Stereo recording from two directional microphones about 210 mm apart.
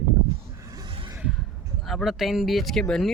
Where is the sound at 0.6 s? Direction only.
15° right (ahead or behind).